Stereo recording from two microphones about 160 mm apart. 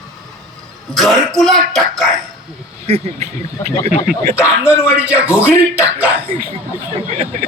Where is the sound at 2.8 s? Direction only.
40° right (ahead or behind).